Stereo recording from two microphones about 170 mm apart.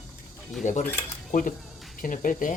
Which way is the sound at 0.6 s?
45° left (ahead or behind).